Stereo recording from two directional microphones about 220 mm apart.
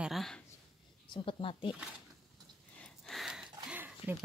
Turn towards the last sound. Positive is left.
turn(degrees=-10)  # may be behind; listen again after turning